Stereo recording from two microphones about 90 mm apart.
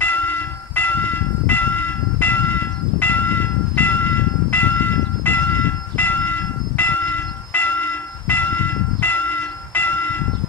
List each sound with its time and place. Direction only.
0.0 s train: 20° left (ahead or behind)